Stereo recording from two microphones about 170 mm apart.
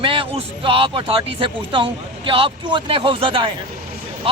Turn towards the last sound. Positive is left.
turn(degrees=-30)  # may be behind; listen again after turning